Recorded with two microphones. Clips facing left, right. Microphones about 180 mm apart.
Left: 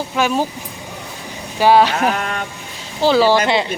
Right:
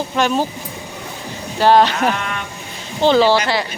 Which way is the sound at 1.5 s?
10° left (ahead or behind).